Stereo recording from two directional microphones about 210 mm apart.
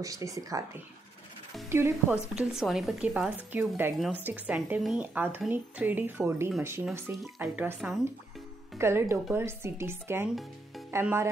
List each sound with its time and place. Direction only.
0.0 s a woman's voice: 15° right (ahead or behind)
1.7 s a woman's voice: 10° right (ahead or behind)